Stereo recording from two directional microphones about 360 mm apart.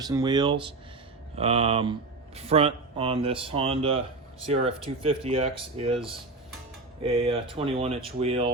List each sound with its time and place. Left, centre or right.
0.0 s speech: centre
7.0 s speech: centre